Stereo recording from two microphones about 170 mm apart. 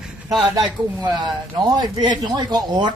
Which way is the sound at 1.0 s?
25° right (ahead or behind).